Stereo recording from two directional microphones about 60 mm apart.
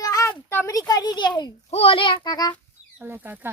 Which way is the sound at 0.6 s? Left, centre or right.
Left.